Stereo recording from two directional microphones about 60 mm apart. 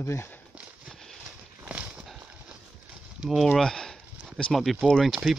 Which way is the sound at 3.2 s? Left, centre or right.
Centre.